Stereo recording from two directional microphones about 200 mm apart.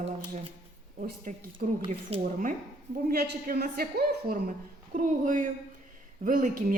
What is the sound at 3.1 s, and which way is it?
A woman's voice, 50° right (ahead or behind).